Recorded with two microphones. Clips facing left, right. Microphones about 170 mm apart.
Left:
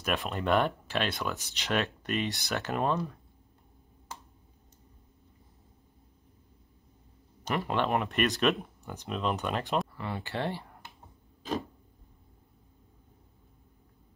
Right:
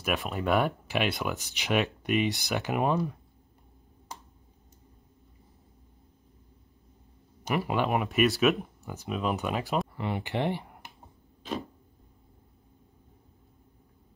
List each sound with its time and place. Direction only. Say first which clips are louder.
0.0 s speech: right 1 dB; 5° right (ahead or behind)
7.4 s speech: right 2 dB; 10° right (ahead or behind)
9.9 s speech: right 4 dB; 20° right (ahead or behind)